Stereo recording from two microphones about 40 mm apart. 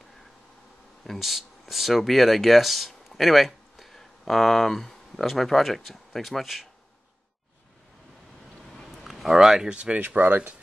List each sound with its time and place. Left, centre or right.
1.0 s speech: centre
8.9 s a sound: centre
9.7 s speech: right
9.9 s speech: right